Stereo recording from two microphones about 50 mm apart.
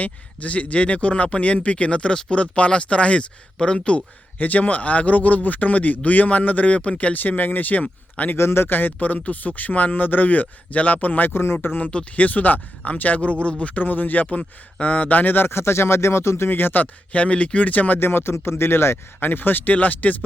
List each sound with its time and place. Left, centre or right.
0.0 s speech: left
4.4 s speech: left
8.4 s speech: left
11.3 s speech: left
16.5 s speech: left
18.0 s speech: left